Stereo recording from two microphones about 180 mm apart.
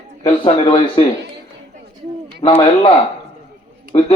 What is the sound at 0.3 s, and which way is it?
Speech, 30° left (ahead or behind).